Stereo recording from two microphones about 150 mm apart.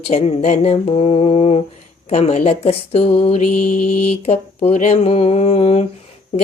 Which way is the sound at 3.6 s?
60° left (ahead or behind).